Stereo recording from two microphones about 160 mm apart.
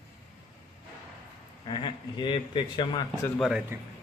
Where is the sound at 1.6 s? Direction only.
30° left (ahead or behind).